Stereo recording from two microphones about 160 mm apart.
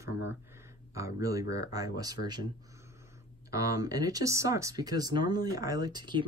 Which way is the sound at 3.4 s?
20° right (ahead or behind).